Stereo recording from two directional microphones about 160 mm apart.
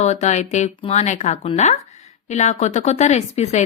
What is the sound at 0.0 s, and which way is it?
Speech, 45° left (ahead or behind).